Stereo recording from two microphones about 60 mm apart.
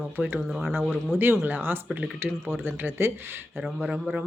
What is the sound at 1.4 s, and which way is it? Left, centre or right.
Speech, right.